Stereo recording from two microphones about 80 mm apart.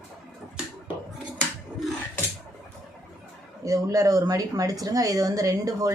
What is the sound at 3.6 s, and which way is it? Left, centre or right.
Speech, right.